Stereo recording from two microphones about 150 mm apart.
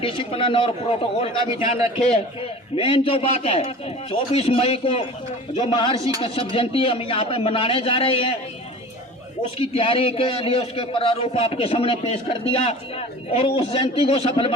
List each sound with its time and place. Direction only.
0.0 s a man's voice: 35° left (ahead or behind)
9.6 s a man's voice: 40° left (ahead or behind)